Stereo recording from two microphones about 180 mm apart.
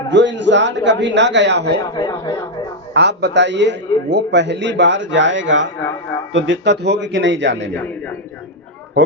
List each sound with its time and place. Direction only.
0.1 s a man's voice: 80° right
1.8 s speech: 20° left (ahead or behind)
2.9 s a man's voice: 70° right (ahead or behind)